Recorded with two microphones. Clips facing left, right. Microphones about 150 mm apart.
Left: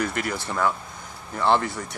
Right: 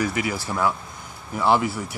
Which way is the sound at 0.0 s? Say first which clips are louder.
Right 2 dB; 5° right (ahead or behind).